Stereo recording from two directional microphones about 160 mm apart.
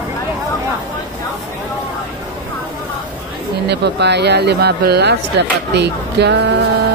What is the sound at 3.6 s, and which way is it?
Speech, 90° right.